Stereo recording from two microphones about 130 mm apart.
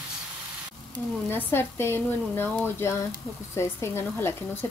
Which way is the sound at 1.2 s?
15° left (ahead or behind).